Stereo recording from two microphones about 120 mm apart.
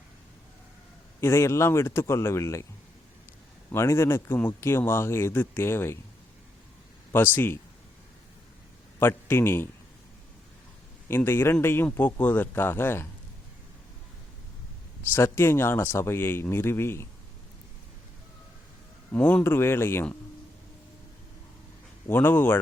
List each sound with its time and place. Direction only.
1.2 s speech: 20° left (ahead or behind)
3.7 s speech: 20° left (ahead or behind)
7.1 s speech: 15° left (ahead or behind)
9.0 s a man's voice: 20° left (ahead or behind)
11.1 s speech: 20° left (ahead or behind)
15.1 s speech: 20° left (ahead or behind)
19.1 s speech: 15° left (ahead or behind)
22.0 s speech: 15° left (ahead or behind)